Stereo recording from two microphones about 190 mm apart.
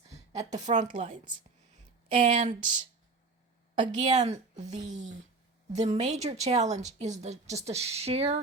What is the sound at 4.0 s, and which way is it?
Speech, 35° right (ahead or behind).